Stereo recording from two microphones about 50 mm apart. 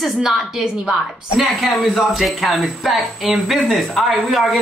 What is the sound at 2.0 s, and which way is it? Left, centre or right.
A man's voice, centre.